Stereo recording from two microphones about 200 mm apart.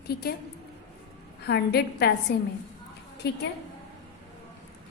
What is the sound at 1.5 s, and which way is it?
Speech, 55° left (ahead or behind).